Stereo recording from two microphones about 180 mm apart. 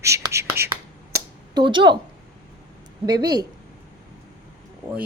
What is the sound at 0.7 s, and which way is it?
Finger snapping, 15° right (ahead or behind).